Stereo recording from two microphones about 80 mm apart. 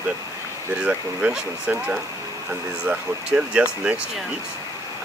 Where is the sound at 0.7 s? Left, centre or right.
Centre.